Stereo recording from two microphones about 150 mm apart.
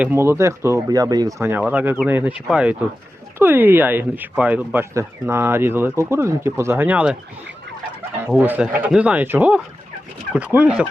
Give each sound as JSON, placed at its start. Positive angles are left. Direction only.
{"t": 0.0, "sound": "speech", "side_deg": -15}
{"t": 8.4, "sound": "speech", "side_deg": -10}